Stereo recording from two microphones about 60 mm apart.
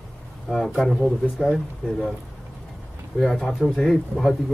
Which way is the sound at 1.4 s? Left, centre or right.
Centre.